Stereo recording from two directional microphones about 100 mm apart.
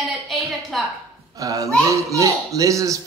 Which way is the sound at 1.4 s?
35° right (ahead or behind).